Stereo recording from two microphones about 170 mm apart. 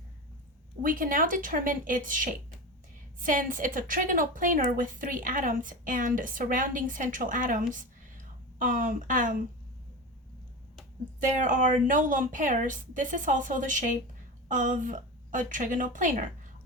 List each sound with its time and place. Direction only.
0.8 s a woman's voice: 55° right (ahead or behind)
11.2 s a woman's voice: 50° right (ahead or behind)